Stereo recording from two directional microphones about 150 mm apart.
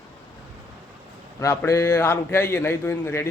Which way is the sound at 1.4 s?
20° left (ahead or behind).